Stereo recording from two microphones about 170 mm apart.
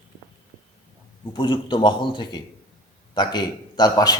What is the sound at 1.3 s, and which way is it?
A man's voice, 30° left (ahead or behind).